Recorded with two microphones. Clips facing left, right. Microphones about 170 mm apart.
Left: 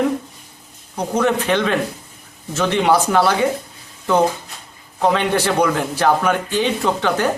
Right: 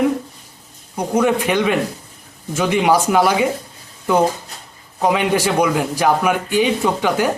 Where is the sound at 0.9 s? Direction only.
10° right (ahead or behind).